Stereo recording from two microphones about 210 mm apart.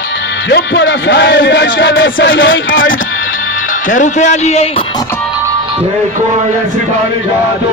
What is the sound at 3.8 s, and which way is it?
Speech, 35° left (ahead or behind).